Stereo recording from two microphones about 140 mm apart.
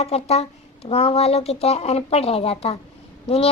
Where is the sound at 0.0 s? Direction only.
45° left (ahead or behind).